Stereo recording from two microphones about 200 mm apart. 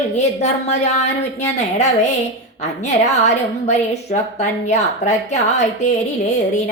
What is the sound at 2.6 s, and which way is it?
A woman's voice, 35° left (ahead or behind).